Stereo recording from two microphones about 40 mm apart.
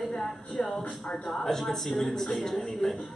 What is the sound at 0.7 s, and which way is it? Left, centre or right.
A man's voice, centre.